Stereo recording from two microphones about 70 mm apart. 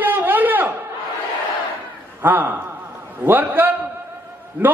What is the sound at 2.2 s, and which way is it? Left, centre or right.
A man's voice, right.